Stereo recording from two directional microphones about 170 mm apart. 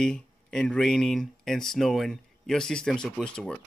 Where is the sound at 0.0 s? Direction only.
5° left (ahead or behind).